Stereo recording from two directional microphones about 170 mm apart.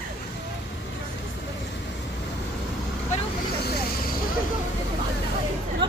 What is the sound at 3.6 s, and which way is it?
Vehicle, 60° left (ahead or behind).